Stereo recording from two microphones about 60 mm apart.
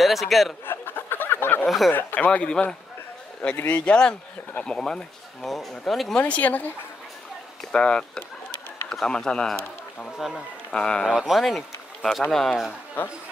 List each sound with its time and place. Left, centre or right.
0.0 s speech: centre
0.7 s a sound: left
1.9 s speech: left
2.1 s speech: left; by 6.1 s centre
6.1 s speech: left
7.7 s speech: centre
10.1 s speech: centre
10.7 s speech: centre
11.1 s speech: centre